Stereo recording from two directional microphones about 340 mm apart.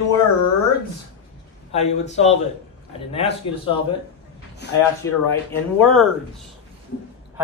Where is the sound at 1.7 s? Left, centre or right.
Centre.